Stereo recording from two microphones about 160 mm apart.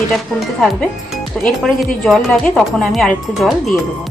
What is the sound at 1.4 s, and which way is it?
Speech, centre (ahead or behind).